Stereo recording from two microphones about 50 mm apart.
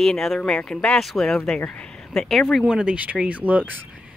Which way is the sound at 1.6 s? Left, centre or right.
Centre.